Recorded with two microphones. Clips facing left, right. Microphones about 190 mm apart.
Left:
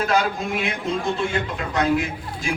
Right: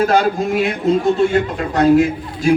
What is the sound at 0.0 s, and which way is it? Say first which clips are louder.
A man's voice: right 7 dB; 40° right (ahead or behind).